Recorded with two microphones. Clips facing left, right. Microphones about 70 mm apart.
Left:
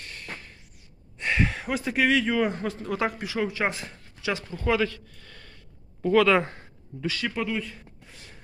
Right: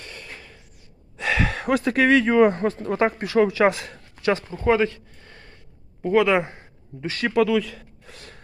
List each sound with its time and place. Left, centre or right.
1.2 s speech: right
3.2 s speech: right; by 7.1 s centre
7.1 s speech: right
7.4 s a sound: right